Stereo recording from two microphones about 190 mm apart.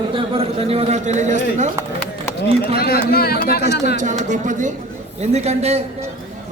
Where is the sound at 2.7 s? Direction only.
55° left (ahead or behind).